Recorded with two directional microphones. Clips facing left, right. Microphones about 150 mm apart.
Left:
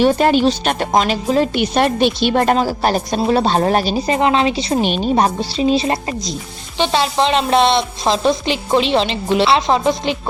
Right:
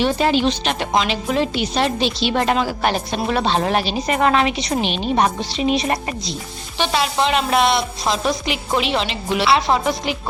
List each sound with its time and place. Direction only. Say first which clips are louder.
0.0 s speech: left 4 dB; 50° left (ahead or behind)
1.6 s a woman's voice: left 5 dB; 55° left (ahead or behind); by 4.8 s 30° left (ahead or behind)
4.8 s a woman's voice: left 3 dB; 45° left (ahead or behind); by 10.2 s 25° left (ahead or behind)